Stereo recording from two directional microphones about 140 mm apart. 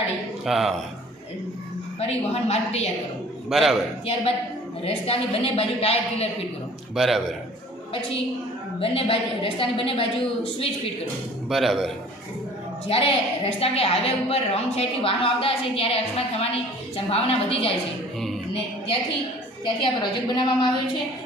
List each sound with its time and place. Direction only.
0.4 s a man's voice: centre (ahead or behind)
2.0 s a woman's voice: 50° left (ahead or behind)
3.5 s a man's voice: centre (ahead or behind)
4.9 s a woman's voice: 45° left (ahead or behind)
6.9 s a man's voice: centre (ahead or behind)
8.8 s a woman's voice: 45° left (ahead or behind)
11.4 s a man's voice: centre (ahead or behind)
12.9 s a woman's voice: 40° left (ahead or behind)
19.6 s a woman's voice: 35° left (ahead or behind)